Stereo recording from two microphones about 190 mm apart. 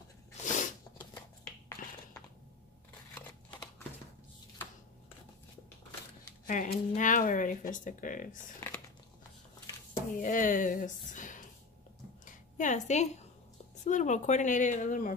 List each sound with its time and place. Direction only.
0.4 s sneeze: 40° left (ahead or behind)
6.4 s speech: 45° left (ahead or behind)
8.5 s crumpling: 15° left (ahead or behind)
10.1 s a woman's voice: 45° left (ahead or behind)